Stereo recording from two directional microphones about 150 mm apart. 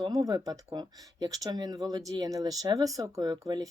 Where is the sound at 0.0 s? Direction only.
25° right (ahead or behind).